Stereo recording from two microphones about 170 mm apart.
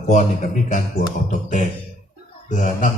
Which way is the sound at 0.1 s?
45° left (ahead or behind).